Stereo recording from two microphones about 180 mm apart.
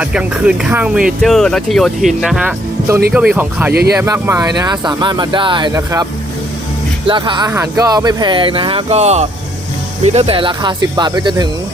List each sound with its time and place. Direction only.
0.0 s speech: 5° right (ahead or behind)
3.7 s speech: 65° right (ahead or behind)
3.9 s speech: 15° right (ahead or behind)
7.1 s speech: 25° right (ahead or behind)